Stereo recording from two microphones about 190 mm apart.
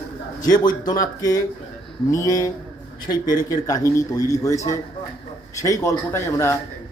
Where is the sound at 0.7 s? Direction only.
20° left (ahead or behind).